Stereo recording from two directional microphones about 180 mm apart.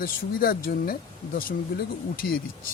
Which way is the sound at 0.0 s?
55° left (ahead or behind).